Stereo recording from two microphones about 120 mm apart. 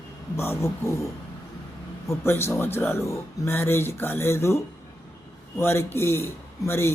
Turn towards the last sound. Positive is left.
turn(degrees=20)  # may be behind; listen again after turning